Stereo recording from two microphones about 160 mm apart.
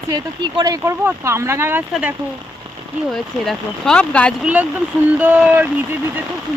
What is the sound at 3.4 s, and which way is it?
Speech, 5° left (ahead or behind).